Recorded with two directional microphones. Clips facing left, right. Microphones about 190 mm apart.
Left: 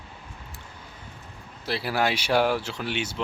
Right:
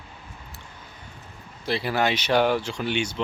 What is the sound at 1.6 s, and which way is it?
Speech, 5° left (ahead or behind).